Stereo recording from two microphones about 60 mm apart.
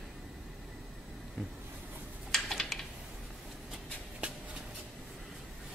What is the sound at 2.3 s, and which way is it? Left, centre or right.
Typing, centre.